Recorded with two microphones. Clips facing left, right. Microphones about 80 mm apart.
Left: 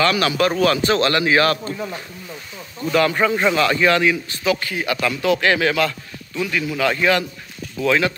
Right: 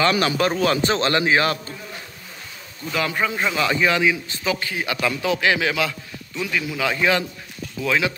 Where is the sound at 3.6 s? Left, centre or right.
Centre.